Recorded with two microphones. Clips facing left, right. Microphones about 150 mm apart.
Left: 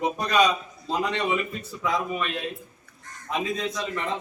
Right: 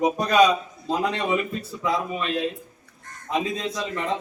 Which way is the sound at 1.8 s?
30° right (ahead or behind).